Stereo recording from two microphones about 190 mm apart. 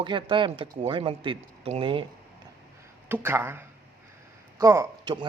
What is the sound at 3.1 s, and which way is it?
A man's voice, 10° right (ahead or behind).